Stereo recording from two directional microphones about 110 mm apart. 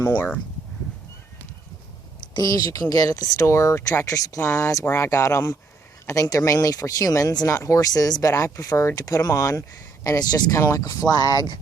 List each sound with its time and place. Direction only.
0.0 s speech: 15° left (ahead or behind)
2.4 s speech: 35° left (ahead or behind)